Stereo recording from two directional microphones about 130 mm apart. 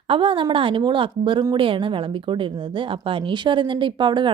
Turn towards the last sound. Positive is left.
turn(degrees=-40)  # may be behind; listen again after turning